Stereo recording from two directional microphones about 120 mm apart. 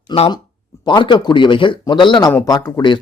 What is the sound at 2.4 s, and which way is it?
Speech, 30° left (ahead or behind).